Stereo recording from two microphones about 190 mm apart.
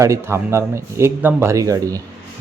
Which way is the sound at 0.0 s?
15° right (ahead or behind).